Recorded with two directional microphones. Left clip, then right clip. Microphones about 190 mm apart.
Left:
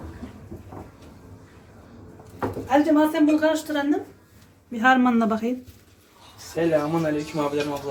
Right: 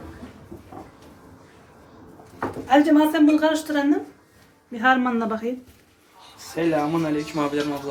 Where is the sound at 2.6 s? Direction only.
Centre (ahead or behind).